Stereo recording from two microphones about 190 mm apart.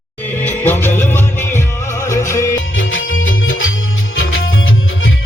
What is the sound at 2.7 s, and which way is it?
Music, 90° left.